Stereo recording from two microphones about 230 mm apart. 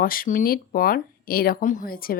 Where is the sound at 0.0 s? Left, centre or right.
Left.